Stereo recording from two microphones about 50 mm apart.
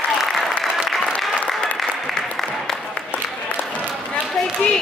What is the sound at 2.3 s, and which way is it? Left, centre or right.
Music, centre.